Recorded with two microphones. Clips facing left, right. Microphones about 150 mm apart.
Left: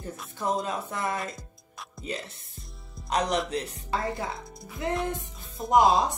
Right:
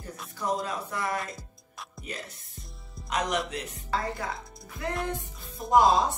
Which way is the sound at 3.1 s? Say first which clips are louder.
Left 3 dB; 35° left (ahead or behind).